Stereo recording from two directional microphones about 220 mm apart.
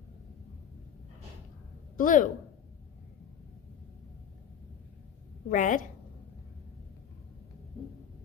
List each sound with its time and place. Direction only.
2.0 s speech: 35° left (ahead or behind)
5.5 s speech: 35° left (ahead or behind)